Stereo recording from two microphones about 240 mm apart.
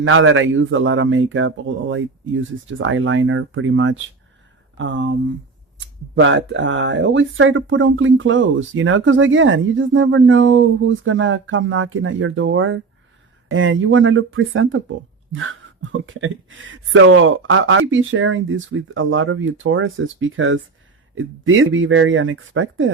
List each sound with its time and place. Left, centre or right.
0.0 s speech: right
6.1 s speech: right